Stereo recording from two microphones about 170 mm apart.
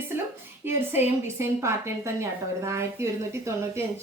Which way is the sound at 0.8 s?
15° right (ahead or behind).